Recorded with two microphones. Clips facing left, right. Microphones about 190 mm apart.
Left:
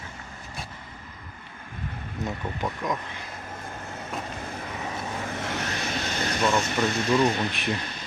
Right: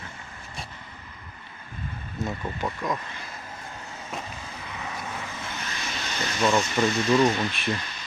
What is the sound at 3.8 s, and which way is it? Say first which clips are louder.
Vehicle: left 2 dB; 55° left (ahead or behind).